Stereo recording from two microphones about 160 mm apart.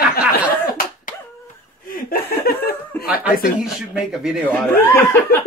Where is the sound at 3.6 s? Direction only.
5° right (ahead or behind).